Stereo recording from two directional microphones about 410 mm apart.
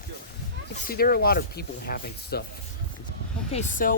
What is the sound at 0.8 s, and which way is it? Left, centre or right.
Speech, left.